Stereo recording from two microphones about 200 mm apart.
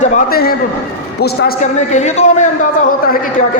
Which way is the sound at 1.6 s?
35° left (ahead or behind).